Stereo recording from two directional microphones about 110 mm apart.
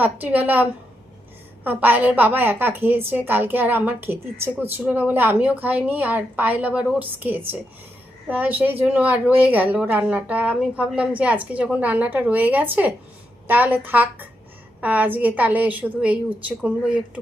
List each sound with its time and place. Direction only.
0.0 s a woman's voice: 15° right (ahead or behind)